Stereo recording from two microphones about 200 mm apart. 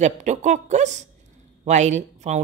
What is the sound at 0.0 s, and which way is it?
Speech, 35° right (ahead or behind).